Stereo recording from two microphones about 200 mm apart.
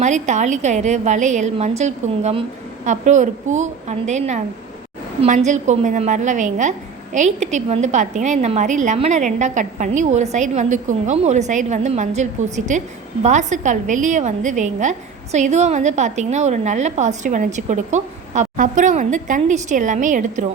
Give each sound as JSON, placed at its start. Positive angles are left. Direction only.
{"t": 0.0, "sound": "a woman's voice", "side_deg": -35}